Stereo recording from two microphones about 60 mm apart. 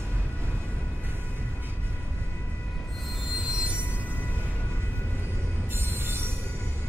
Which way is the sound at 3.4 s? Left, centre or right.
Centre.